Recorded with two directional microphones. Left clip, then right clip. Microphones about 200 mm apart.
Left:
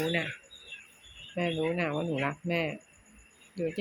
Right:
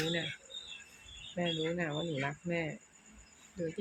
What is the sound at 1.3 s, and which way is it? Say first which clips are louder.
Speech: left 5 dB; 10° left (ahead or behind).